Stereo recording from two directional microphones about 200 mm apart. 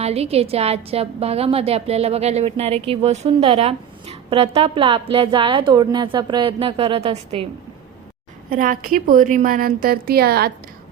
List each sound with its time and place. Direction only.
0.0 s a woman's voice: 30° right (ahead or behind)
8.4 s a woman's voice: 40° right (ahead or behind)